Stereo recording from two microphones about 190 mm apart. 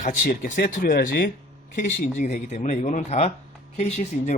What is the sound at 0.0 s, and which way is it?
Speech, 45° left (ahead or behind).